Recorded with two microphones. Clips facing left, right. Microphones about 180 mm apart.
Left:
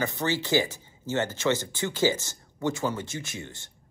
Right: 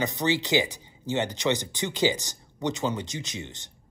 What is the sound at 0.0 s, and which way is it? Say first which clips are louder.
Speech: right 2 dB; 20° right (ahead or behind).